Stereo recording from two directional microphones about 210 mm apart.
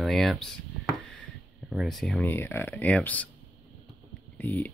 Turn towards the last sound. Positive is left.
turn(degrees=10)  # may be behind; listen again after turning